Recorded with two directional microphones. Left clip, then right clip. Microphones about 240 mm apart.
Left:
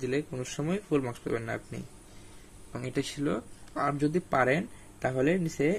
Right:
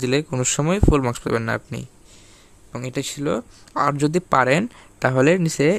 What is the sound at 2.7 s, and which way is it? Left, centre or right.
Speech, right.